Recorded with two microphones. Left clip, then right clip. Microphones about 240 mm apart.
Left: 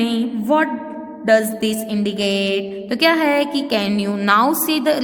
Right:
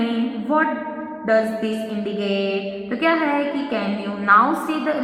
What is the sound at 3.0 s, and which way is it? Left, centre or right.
A woman's voice, left.